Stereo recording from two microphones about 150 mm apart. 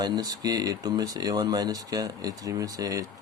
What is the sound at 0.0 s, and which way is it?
Speech, 25° right (ahead or behind).